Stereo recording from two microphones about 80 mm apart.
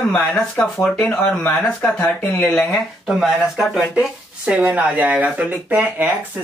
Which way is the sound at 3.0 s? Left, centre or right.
Centre.